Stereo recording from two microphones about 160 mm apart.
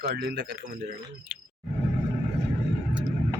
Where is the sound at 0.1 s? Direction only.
90° right.